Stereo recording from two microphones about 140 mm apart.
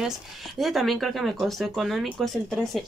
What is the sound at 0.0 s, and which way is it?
Speech, centre (ahead or behind).